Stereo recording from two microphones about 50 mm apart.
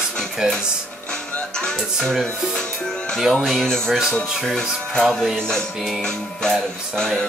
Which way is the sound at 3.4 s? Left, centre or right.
Centre.